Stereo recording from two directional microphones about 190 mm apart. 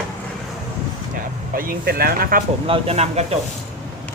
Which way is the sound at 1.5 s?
50° right (ahead or behind).